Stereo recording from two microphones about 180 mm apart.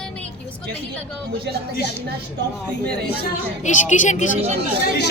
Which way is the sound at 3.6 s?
40° left (ahead or behind).